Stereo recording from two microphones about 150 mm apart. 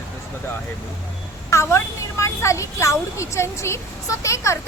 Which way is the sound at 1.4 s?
20° left (ahead or behind).